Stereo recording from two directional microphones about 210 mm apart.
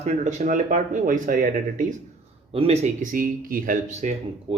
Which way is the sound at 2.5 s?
30° right (ahead or behind).